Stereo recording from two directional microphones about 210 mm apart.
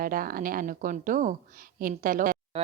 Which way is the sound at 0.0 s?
45° right (ahead or behind).